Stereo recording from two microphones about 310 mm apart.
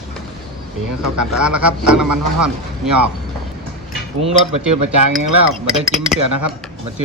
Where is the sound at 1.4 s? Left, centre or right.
Centre.